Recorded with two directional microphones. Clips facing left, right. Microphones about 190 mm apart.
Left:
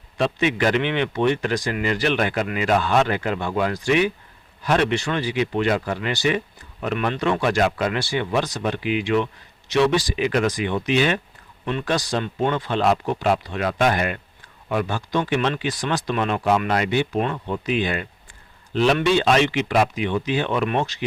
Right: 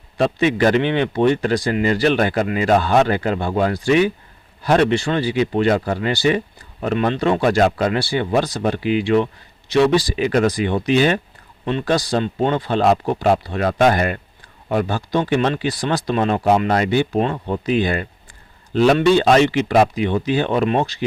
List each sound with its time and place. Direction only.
0.2 s a man's voice: 35° right (ahead or behind)